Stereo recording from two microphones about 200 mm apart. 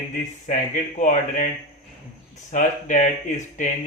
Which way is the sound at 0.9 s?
40° left (ahead or behind).